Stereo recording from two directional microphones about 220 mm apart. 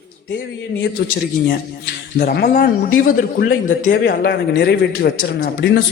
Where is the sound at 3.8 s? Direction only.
50° left (ahead or behind).